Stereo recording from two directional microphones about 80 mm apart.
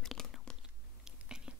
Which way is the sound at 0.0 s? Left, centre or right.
Centre.